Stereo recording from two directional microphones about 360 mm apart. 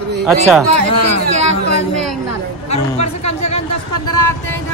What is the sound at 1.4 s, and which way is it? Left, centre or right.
Speech, right.